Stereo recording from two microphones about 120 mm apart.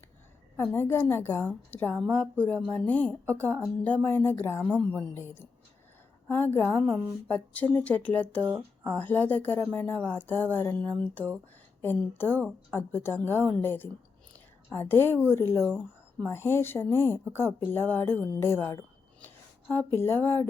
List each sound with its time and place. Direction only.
0.5 s a woman's voice: 20° left (ahead or behind)
6.7 s a woman's voice: 5° left (ahead or behind)
14.3 s a sound: 20° left (ahead or behind)
15.3 s speech: 20° left (ahead or behind)
19.2 s a sound: 15° left (ahead or behind)
20.0 s speech: 20° left (ahead or behind)